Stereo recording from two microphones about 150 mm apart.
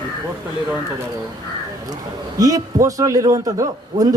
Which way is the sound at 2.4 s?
25° right (ahead or behind).